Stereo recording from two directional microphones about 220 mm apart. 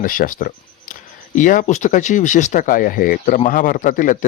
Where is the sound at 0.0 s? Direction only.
40° left (ahead or behind).